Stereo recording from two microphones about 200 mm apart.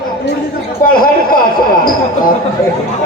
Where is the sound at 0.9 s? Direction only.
45° left (ahead or behind).